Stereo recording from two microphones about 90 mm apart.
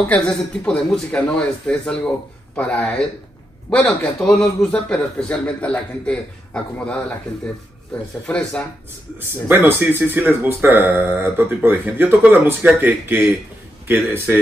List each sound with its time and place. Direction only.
0.0 s speech: 10° left (ahead or behind)
8.3 s speech: 10° left (ahead or behind)
9.2 s speech: 25° right (ahead or behind)